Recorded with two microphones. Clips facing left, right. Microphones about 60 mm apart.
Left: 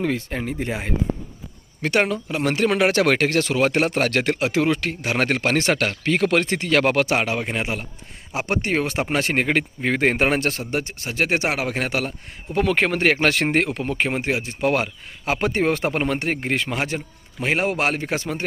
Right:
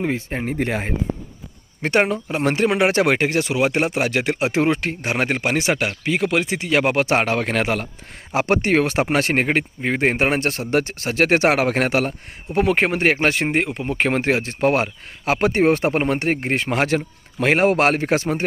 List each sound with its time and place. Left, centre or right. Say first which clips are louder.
0.0 s speech: right 1 dB; right
1.8 s speech: right 2 dB; right; by 4.4 s centre
4.4 s speech: right 1 dB; right
5.1 s speech: left 1 dB; centre
7.0 s speech: right 2 dB; right
7.3 s a man's voice: right 5 dB; right
8.3 s speech: right 5 dB; right
9.8 s speech: even; centre
10.4 s speech: right 4 dB; right
11.9 s speech: right 5 dB; right
13.4 s speech: even; centre
13.9 s speech: right 6 dB; right
14.7 s speech: right 2 dB; right
17.4 s speech: right 5 dB; right